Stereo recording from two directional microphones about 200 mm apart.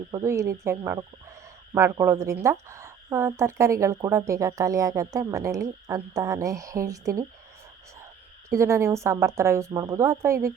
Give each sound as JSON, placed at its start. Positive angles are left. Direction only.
{"t": 0.1, "sound": "a woman's voice", "side_deg": -15}
{"t": 8.4, "sound": "a woman's voice", "side_deg": -15}